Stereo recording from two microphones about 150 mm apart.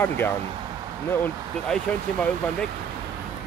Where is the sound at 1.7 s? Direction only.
5° left (ahead or behind).